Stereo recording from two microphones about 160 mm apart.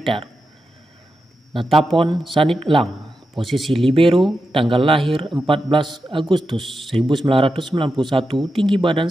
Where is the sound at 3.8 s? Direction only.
35° right (ahead or behind).